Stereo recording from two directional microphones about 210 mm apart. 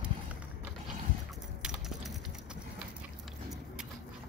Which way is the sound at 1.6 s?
Centre (ahead or behind).